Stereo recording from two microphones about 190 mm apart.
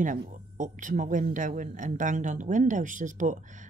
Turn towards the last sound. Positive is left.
turn(degrees=-40)  # may be behind; listen again after turning